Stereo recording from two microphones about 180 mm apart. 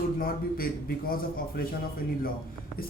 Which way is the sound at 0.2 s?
55° left (ahead or behind).